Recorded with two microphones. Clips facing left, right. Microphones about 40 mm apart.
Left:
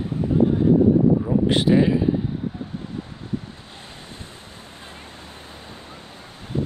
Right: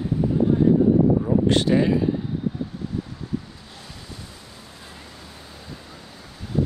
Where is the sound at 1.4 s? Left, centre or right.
Centre.